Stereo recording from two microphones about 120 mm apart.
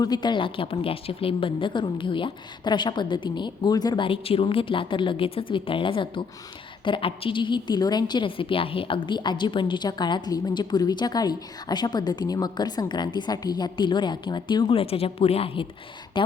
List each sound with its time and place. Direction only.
0.0 s a woman's voice: 35° left (ahead or behind)
14.8 s a woman's voice: 50° left (ahead or behind)
16.1 s a woman's voice: 40° left (ahead or behind)